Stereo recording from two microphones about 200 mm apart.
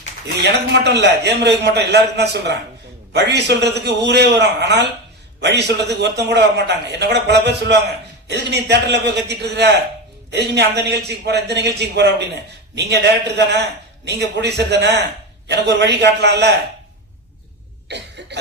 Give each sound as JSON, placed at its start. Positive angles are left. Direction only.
{"t": 0.4, "sound": "a man's voice", "side_deg": -60}
{"t": 17.8, "sound": "cough", "side_deg": -60}